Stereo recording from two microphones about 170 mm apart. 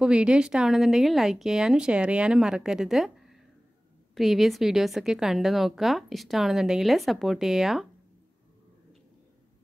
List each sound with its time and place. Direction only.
0.0 s a woman's voice: 5° right (ahead or behind)